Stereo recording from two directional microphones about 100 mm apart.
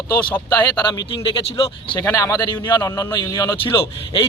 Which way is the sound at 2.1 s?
35° left (ahead or behind).